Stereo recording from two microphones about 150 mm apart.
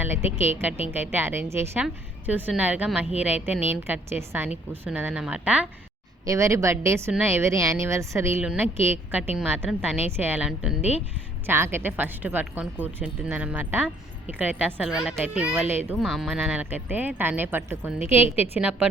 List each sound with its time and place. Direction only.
0.0 s speech: 15° right (ahead or behind)
6.2 s a woman's voice: 20° right (ahead or behind)
16.0 s speech: centre (ahead or behind)